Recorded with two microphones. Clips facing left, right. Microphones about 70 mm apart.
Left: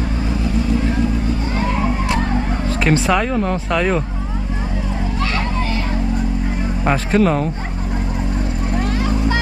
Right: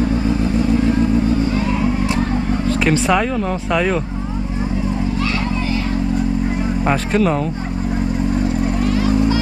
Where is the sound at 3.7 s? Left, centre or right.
Centre.